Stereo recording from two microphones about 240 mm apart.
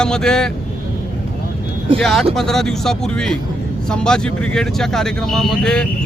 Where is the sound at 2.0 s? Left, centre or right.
Centre.